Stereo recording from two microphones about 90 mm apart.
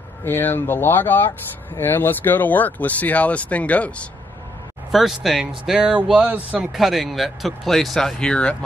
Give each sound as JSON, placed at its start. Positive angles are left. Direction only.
{"t": 0.2, "sound": "speech", "side_deg": 25}
{"t": 4.9, "sound": "speech", "side_deg": 0}
{"t": 6.7, "sound": "speech", "side_deg": 0}